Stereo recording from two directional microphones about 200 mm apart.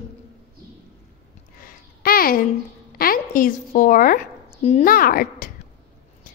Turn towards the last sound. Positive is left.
turn(degrees=45)  # may be behind; listen again after turning